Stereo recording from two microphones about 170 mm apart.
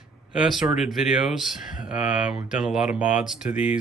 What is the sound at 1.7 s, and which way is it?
Speech, 50° left (ahead or behind).